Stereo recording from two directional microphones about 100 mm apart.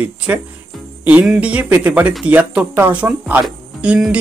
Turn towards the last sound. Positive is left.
turn(degrees=-10)  # may be behind; listen again after turning